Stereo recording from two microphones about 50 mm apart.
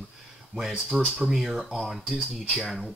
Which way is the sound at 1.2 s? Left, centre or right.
Centre.